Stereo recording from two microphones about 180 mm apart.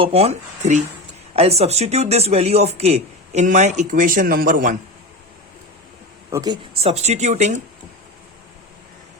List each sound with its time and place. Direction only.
0.0 s speech: 35° right (ahead or behind)
6.3 s speech: 20° right (ahead or behind)
6.8 s speech: 40° right (ahead or behind)